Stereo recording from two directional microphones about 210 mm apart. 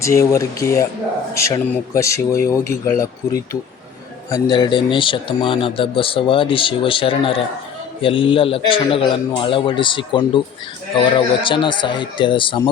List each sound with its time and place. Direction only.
0.0 s speech: 15° left (ahead or behind)